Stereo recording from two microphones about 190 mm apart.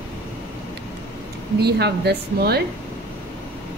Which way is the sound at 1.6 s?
60° right (ahead or behind).